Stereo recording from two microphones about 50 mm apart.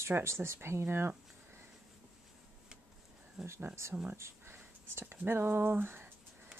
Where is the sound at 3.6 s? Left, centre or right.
Right.